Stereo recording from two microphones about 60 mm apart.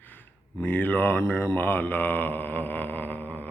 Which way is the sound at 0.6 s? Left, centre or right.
Left.